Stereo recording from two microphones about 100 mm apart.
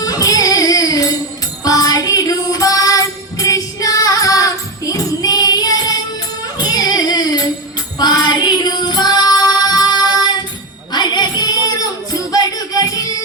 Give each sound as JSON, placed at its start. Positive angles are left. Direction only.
{"t": 0.0, "sound": "music", "side_deg": 40}